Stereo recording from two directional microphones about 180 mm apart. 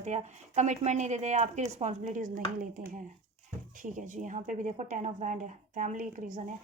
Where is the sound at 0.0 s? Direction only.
40° right (ahead or behind).